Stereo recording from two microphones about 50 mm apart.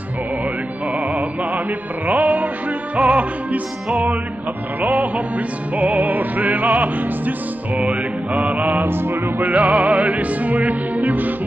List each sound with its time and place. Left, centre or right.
2.0 s music: right
4.8 s music: right
7.8 s music: centre
8.5 s music: right
9.4 s music: right